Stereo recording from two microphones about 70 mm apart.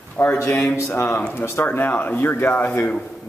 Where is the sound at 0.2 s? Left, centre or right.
Left.